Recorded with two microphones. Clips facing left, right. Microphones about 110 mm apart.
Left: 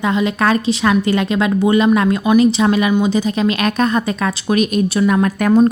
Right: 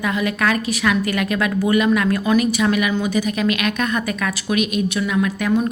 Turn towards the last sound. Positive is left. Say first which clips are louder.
# left 7 dB
turn(degrees=45)  # may be behind; listen again after turning